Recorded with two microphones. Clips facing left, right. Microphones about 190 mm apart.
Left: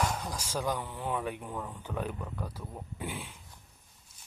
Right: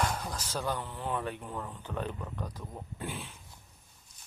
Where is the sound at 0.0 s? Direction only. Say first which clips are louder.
Even; 5° left (ahead or behind).